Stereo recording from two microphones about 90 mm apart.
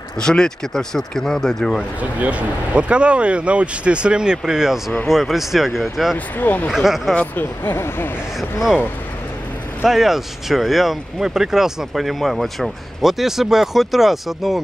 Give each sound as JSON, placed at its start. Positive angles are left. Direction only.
{"t": 0.2, "sound": "speech", "side_deg": 10}
{"t": 2.0, "sound": "speech", "side_deg": -15}
{"t": 6.1, "sound": "speech", "side_deg": 20}
{"t": 6.7, "sound": "speech", "side_deg": -5}
{"t": 7.2, "sound": "speech", "side_deg": 20}
{"t": 9.8, "sound": "speech", "side_deg": -5}